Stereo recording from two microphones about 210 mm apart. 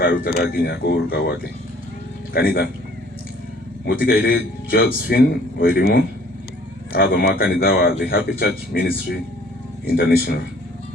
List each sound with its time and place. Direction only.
0.0 s a man's voice: 45° left (ahead or behind)
3.8 s a man's voice: 45° left (ahead or behind)